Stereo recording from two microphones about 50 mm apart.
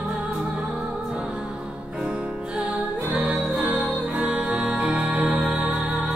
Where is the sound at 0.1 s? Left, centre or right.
Centre.